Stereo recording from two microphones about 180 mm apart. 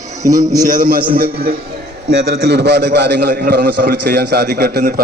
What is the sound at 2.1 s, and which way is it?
A man's voice, 80° right.